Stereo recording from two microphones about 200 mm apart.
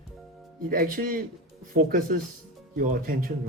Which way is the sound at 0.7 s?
45° right (ahead or behind).